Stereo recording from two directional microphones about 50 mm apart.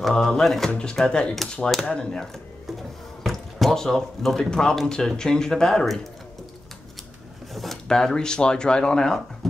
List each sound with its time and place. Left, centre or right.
0.1 s speech: centre
3.3 s drip: centre
4.4 s speech: centre
7.5 s speech: centre